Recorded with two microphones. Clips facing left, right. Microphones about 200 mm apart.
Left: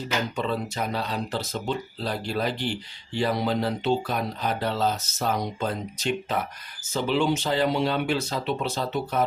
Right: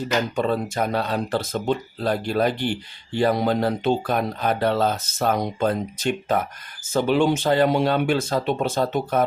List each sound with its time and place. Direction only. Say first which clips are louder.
0.3 s speech: right 5 dB; 50° right (ahead or behind)